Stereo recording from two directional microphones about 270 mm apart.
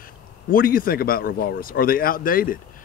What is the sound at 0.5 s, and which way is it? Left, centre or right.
Speech, left.